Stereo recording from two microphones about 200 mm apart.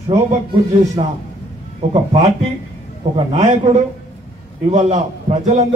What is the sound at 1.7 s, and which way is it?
A man's voice, 30° right (ahead or behind).